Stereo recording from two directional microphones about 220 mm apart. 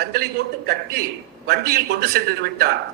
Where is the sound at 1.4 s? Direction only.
45° right (ahead or behind).